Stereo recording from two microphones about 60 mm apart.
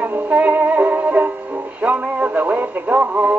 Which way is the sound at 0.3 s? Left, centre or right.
Right.